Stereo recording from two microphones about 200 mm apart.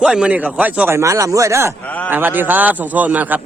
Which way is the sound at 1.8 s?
10° left (ahead or behind).